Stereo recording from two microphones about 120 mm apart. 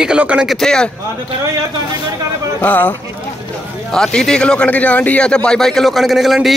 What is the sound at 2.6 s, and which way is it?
Speech, 15° left (ahead or behind).